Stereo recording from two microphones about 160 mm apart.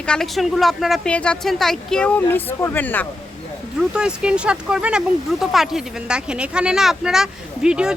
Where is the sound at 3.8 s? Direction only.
5° right (ahead or behind).